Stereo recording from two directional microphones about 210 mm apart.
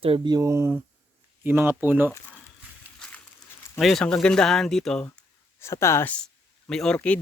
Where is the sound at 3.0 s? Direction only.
5° left (ahead or behind).